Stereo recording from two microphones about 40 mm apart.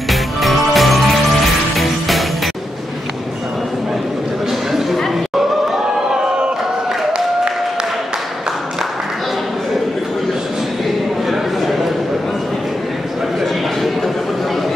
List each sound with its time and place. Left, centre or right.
0.1 s music: centre
6.2 s crowd: right
7.1 s applause: right